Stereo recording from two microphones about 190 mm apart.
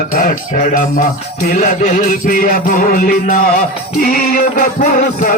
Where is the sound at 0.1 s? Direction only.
45° left (ahead or behind).